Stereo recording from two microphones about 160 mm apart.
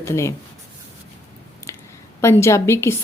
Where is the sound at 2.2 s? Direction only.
15° left (ahead or behind).